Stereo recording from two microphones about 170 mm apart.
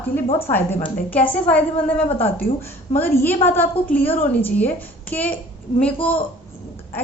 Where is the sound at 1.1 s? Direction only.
10° left (ahead or behind).